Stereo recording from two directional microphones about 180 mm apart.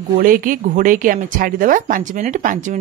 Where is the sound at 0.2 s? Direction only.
50° right (ahead or behind).